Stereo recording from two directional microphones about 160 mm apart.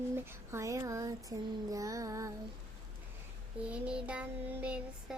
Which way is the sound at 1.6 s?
20° right (ahead or behind).